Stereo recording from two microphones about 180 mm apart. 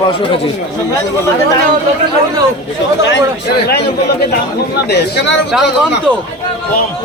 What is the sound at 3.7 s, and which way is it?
Speech, 65° left (ahead or behind).